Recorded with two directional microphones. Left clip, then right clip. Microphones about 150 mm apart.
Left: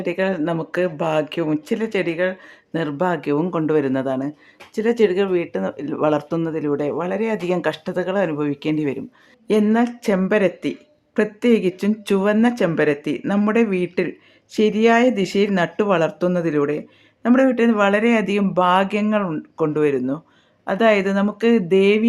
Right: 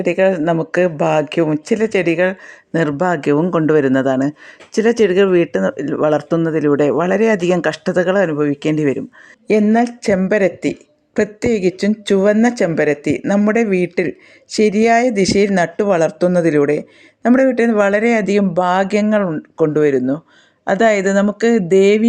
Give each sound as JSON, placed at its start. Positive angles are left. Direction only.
{"t": 0.0, "sound": "speech", "side_deg": -30}
{"t": 8.6, "sound": "speech", "side_deg": -35}